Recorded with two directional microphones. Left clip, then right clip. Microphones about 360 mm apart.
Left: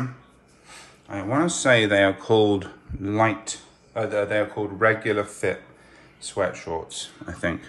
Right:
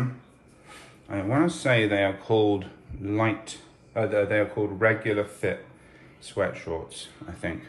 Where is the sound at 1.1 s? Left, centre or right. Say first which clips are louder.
Left 1 dB; centre.